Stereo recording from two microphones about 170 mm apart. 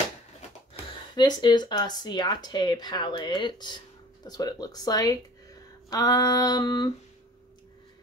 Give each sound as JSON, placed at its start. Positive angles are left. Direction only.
{"t": 1.1, "sound": "speech", "side_deg": 25}